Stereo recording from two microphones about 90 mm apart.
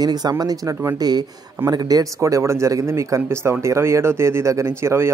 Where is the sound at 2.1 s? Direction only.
35° right (ahead or behind).